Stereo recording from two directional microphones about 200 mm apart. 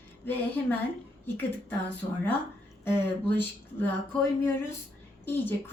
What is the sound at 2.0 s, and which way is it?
Speech, 25° left (ahead or behind).